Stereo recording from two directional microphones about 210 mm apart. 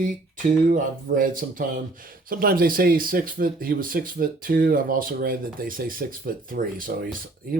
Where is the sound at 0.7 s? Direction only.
40° right (ahead or behind).